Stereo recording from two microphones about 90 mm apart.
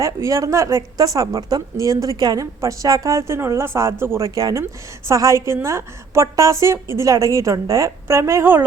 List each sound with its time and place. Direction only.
0.0 s a woman's voice: 35° right (ahead or behind)
4.4 s a woman's voice: 45° right (ahead or behind); by 8.6 s 25° right (ahead or behind)